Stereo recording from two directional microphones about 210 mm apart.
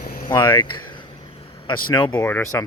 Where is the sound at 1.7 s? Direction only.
20° left (ahead or behind).